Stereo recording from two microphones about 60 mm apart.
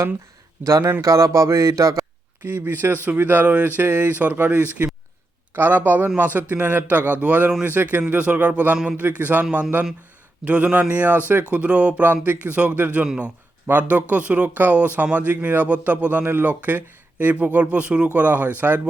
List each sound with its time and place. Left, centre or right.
1.0 s speech: right
2.4 s a man's voice: right